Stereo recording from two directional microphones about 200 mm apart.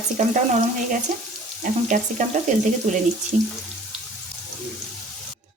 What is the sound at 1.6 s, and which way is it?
A woman's voice, 40° right (ahead or behind).